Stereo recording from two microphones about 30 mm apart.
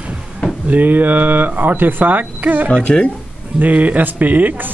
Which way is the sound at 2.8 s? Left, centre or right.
Left.